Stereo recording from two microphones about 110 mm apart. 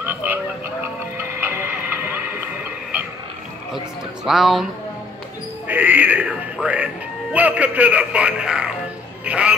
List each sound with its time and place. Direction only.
0.0 s a sound: 20° right (ahead or behind)
4.2 s speech: 5° right (ahead or behind)
5.7 s music: 15° right (ahead or behind)
7.3 s speech: 15° right (ahead or behind)